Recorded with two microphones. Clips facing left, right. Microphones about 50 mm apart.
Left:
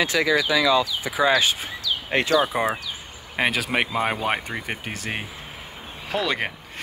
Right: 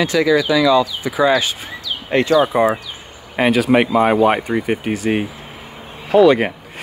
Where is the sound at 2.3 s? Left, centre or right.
Centre.